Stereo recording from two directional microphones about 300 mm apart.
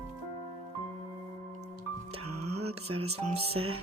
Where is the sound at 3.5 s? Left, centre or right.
Right.